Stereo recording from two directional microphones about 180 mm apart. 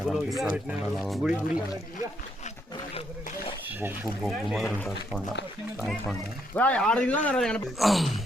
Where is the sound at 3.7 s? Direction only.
10° right (ahead or behind).